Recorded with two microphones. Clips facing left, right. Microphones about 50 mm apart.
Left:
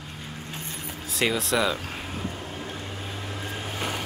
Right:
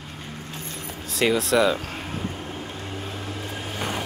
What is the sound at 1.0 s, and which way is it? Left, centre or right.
Speech, centre.